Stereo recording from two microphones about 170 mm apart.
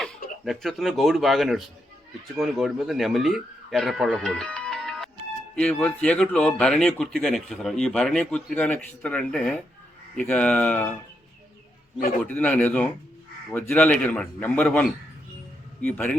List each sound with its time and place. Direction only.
0.4 s a man's voice: centre (ahead or behind)
11.9 s a man's voice: 60° left (ahead or behind)
12.3 s a man's voice: 10° left (ahead or behind)